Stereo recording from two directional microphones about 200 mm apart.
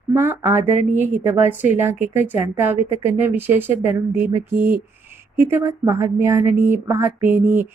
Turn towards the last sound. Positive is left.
turn(degrees=-10)  # may be behind; listen again after turning